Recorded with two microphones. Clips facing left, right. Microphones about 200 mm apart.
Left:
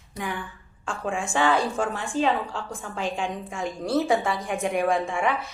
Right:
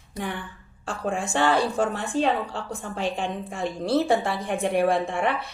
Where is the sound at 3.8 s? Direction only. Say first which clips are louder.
Right 1 dB; 35° right (ahead or behind).